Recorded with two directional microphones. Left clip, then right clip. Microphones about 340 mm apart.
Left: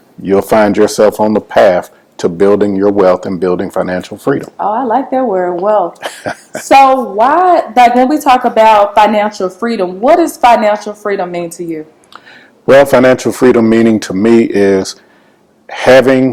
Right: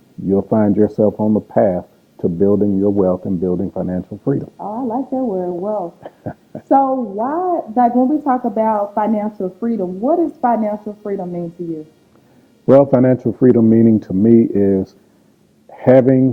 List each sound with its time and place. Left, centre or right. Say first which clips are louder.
0.3 s speech: left 8 dB; centre
1.0 s speech: left 7 dB; centre
1.6 s speech: left 9 dB; centre
12.6 s speech: left 5 dB; left
13.0 s speech: left 7 dB; centre